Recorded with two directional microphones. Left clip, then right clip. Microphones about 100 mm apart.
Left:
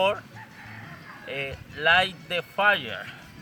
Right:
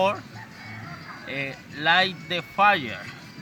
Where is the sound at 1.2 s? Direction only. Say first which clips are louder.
Right 1 dB; 20° left (ahead or behind).